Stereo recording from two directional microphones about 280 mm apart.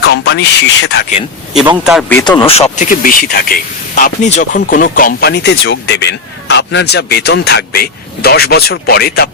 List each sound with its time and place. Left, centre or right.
0.0 s speech: left
1.7 s speech: centre
2.2 s speech: centre; by 9.3 s left